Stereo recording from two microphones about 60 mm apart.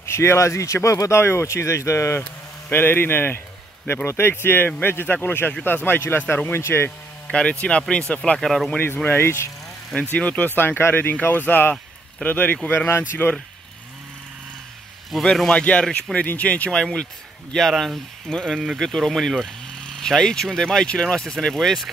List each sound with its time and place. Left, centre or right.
0.0 s speech: left
2.7 s speech: left
7.6 s speech: centre
8.4 s speech: centre
8.8 s speech: left
10.1 s speech: left
15.0 s speech: centre
15.4 s speech: centre